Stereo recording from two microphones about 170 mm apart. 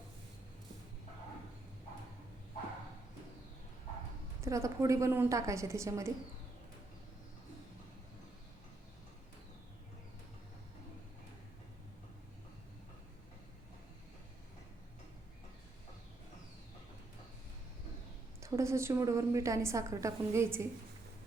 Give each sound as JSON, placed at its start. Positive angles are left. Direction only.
{"t": 4.4, "sound": "a woman's voice", "side_deg": -15}
{"t": 18.3, "sound": "a woman's voice", "side_deg": -15}